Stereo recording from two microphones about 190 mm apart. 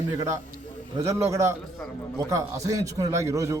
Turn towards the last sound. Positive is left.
turn(degrees=-15)  # may be behind; listen again after turning